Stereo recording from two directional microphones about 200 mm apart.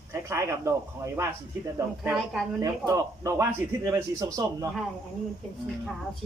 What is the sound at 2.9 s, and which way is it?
A man's voice, 15° right (ahead or behind).